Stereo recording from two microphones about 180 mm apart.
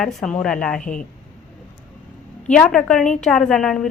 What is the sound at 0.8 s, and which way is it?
Speech, 45° left (ahead or behind).